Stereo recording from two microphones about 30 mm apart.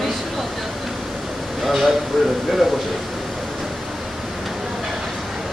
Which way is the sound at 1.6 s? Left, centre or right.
Centre.